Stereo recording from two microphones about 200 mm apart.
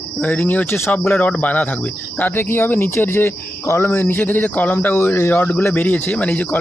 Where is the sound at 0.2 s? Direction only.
5° left (ahead or behind).